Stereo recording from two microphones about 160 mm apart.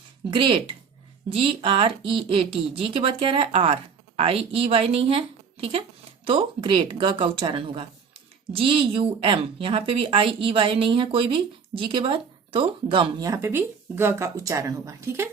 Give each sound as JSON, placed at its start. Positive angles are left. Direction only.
{"t": 0.3, "sound": "a woman's voice", "side_deg": -30}